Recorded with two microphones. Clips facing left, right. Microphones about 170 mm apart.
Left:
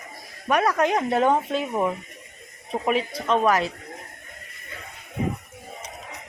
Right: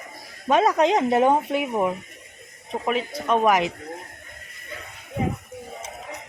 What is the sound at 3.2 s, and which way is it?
Speech, 10° right (ahead or behind).